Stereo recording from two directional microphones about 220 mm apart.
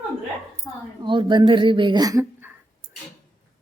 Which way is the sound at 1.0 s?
20° right (ahead or behind).